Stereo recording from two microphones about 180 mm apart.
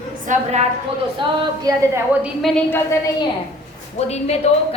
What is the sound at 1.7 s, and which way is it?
Speech, 20° right (ahead or behind).